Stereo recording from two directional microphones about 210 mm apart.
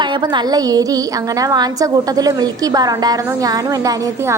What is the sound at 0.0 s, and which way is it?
A woman's voice, 20° right (ahead or behind).